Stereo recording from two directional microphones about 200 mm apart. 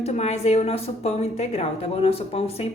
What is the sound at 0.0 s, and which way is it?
Speech, 35° left (ahead or behind).